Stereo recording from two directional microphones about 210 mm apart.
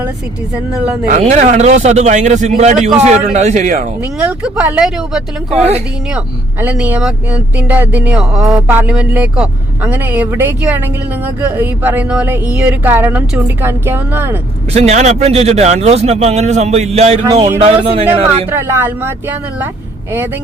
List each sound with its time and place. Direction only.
1.0 s a man's voice: 35° right (ahead or behind)
4.2 s speech: 5° right (ahead or behind)
14.7 s a man's voice: 30° right (ahead or behind)
18.5 s speech: 10° right (ahead or behind)